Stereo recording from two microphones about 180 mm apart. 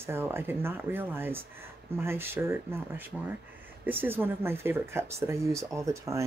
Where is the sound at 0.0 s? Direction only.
15° right (ahead or behind).